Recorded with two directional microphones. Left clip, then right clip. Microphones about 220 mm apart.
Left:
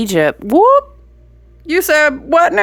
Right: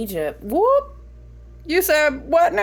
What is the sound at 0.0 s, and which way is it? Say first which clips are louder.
Speech: left 11 dB; 45° left (ahead or behind).